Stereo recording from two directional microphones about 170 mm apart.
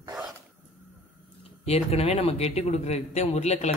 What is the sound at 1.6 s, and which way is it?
A man's voice, 35° left (ahead or behind).